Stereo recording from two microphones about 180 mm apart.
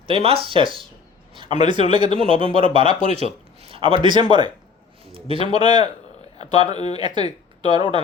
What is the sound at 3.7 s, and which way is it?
A man's voice, 30° right (ahead or behind).